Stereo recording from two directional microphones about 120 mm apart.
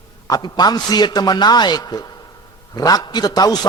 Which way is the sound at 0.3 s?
35° left (ahead or behind).